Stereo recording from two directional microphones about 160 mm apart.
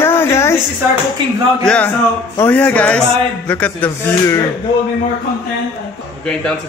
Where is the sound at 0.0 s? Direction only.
15° left (ahead or behind).